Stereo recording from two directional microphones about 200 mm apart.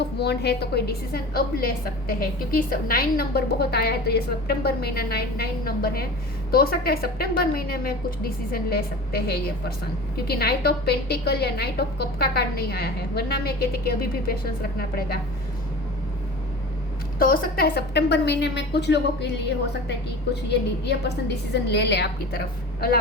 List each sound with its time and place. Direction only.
0.0 s a woman's voice: 55° left (ahead or behind)
17.2 s a woman's voice: 45° left (ahead or behind)